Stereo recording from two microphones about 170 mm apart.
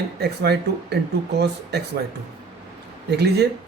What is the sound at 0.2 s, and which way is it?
Speech, 75° right (ahead or behind).